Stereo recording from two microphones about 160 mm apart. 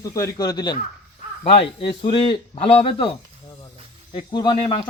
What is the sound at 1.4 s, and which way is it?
Speech, 35° left (ahead or behind).